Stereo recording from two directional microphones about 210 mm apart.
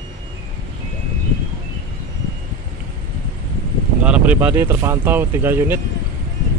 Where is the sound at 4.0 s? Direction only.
5° right (ahead or behind).